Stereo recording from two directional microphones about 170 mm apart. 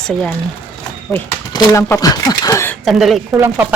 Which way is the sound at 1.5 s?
20° left (ahead or behind).